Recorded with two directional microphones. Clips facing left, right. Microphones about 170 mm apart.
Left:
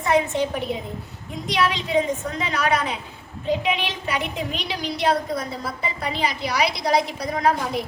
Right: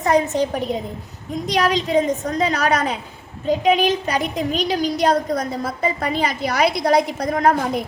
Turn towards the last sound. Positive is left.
turn(degrees=-50)  # may be behind; listen again after turning